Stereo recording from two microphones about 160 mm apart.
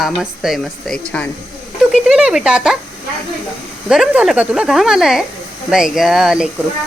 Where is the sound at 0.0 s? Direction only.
Centre (ahead or behind).